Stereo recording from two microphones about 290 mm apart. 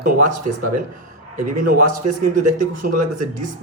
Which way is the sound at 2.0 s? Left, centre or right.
Right.